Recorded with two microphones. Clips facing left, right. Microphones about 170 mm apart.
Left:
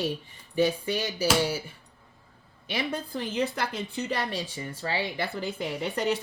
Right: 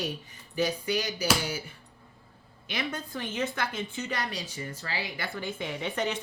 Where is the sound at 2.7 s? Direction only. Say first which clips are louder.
Left 3 dB; 30° left (ahead or behind).